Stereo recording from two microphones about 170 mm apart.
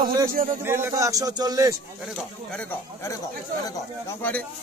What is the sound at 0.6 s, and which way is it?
Speech, 15° right (ahead or behind).